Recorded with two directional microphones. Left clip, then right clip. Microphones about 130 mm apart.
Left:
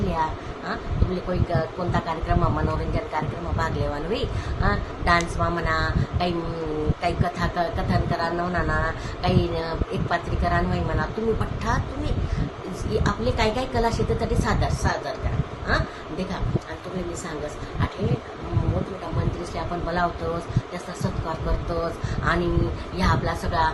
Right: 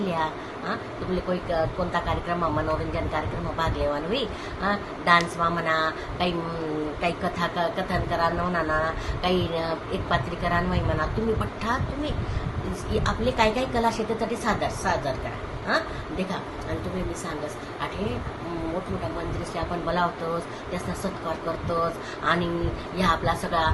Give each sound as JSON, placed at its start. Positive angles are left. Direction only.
{"t": 0.0, "sound": "a sound", "side_deg": 15}
{"t": 1.3, "sound": "speech", "side_deg": 15}
{"t": 3.6, "sound": "speech", "side_deg": 15}
{"t": 19.5, "sound": "speech", "side_deg": 15}